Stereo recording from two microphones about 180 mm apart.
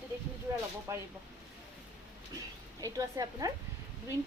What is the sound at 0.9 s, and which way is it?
Speech, 20° right (ahead or behind).